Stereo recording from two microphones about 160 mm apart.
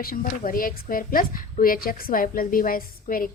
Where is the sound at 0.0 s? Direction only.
65° left (ahead or behind).